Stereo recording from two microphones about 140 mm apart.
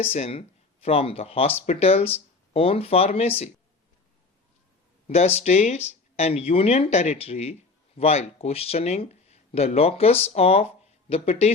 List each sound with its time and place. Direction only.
0.0 s speech: 50° left (ahead or behind)
5.0 s speech: 50° left (ahead or behind)